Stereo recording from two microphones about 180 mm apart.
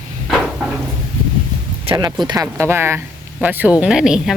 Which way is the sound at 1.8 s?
25° right (ahead or behind).